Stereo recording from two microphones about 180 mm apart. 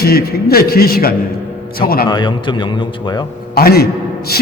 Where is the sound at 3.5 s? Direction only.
60° left (ahead or behind).